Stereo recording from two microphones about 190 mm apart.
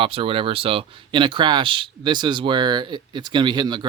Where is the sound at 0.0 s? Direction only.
30° right (ahead or behind).